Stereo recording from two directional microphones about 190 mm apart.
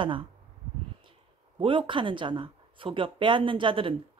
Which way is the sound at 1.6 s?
25° right (ahead or behind).